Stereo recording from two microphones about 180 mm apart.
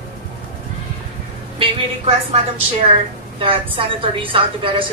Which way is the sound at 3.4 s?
30° right (ahead or behind).